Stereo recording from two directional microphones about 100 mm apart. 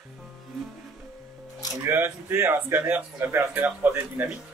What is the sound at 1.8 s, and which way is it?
Speech, 20° right (ahead or behind).